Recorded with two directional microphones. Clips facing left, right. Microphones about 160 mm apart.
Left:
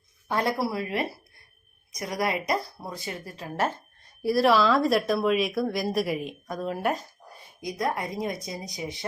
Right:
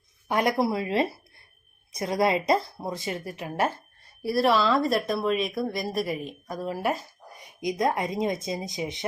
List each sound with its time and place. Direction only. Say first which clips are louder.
0.3 s a woman's voice: right 3 dB; 15° right (ahead or behind)
4.2 s speech: left 2 dB; centre (ahead or behind)
7.3 s a woman's voice: right 4 dB; 20° right (ahead or behind)